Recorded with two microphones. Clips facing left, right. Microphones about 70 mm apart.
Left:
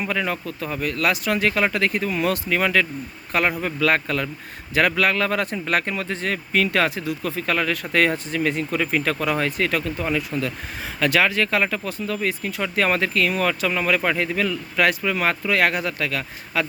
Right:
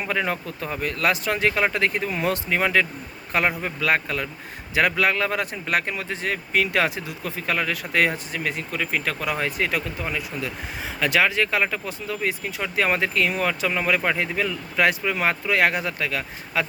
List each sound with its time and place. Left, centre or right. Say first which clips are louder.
0.0 s speech: left 1 dB; right